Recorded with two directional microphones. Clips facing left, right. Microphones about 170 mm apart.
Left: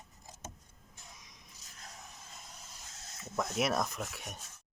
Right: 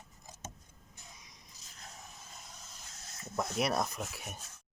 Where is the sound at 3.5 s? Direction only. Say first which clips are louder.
Even; centre (ahead or behind).